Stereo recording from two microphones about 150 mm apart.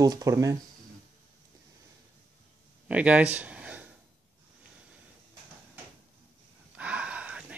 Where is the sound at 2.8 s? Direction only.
10° right (ahead or behind).